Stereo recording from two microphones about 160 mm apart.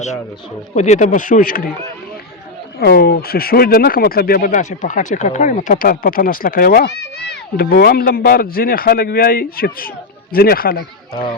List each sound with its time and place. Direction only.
0.7 s speech: 50° left (ahead or behind)
2.7 s speech: 80° left